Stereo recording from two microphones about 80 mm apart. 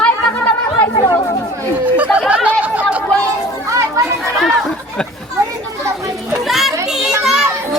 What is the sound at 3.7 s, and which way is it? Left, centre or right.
Children playing, right.